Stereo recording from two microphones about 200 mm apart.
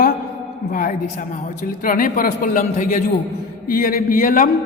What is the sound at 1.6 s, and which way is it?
A man's voice, 45° left (ahead or behind).